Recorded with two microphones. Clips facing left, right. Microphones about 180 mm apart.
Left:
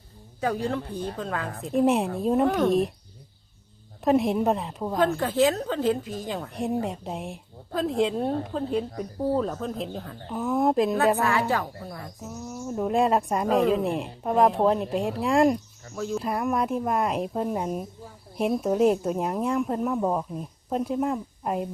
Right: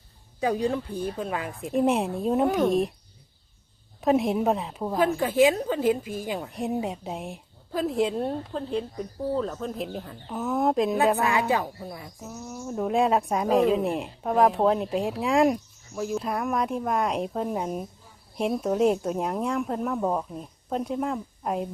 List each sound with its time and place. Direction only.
0.3 s a woman's voice: 15° right (ahead or behind); by 2.9 s centre (ahead or behind)
4.0 s a woman's voice: centre (ahead or behind)
11.2 s a woman's voice: 15° right (ahead or behind)
11.6 s speech: 5° right (ahead or behind)